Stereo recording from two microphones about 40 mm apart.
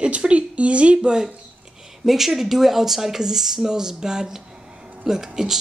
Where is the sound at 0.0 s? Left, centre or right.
Right.